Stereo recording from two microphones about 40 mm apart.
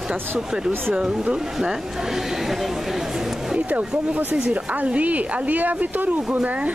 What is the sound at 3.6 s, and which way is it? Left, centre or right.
Speech, right.